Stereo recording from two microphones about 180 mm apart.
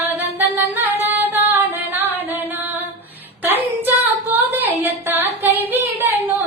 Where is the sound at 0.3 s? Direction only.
10° right (ahead or behind).